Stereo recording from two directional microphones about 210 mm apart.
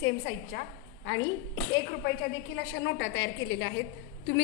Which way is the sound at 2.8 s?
60° left (ahead or behind).